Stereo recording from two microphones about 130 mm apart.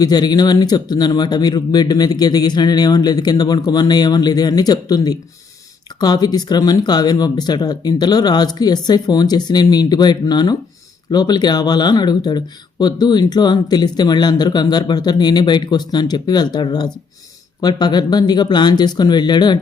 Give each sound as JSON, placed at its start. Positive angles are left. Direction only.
{"t": 0.0, "sound": "speech", "side_deg": 30}